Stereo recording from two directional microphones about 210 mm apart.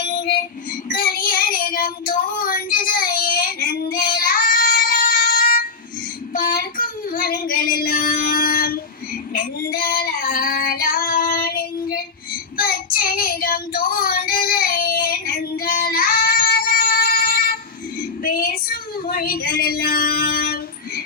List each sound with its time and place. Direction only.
0.0 s music: 50° left (ahead or behind)
0.9 s child singing: 45° left (ahead or behind)
9.3 s female singing: 40° left (ahead or behind)
12.5 s child singing: 45° left (ahead or behind)